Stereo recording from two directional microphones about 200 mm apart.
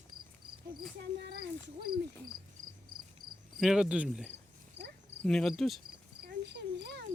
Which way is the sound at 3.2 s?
90° right.